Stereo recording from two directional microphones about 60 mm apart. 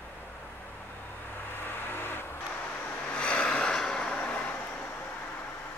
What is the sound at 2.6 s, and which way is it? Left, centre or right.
Vehicle, left.